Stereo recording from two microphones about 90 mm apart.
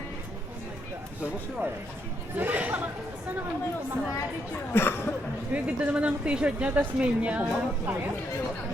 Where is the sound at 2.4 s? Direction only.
20° right (ahead or behind).